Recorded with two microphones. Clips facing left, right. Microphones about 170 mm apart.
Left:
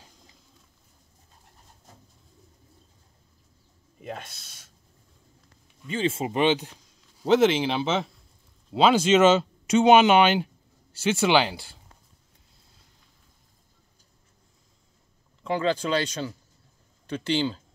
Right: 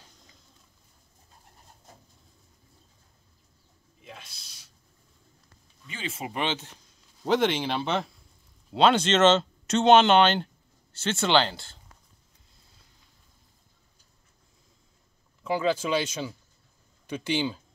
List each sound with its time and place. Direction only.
4.0 s a sound: 55° left (ahead or behind)
5.9 s speech: 30° left (ahead or behind)
7.2 s speech: 5° left (ahead or behind)
15.4 s speech: 5° right (ahead or behind)